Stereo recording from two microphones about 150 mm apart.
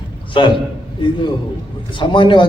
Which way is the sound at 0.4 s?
35° left (ahead or behind).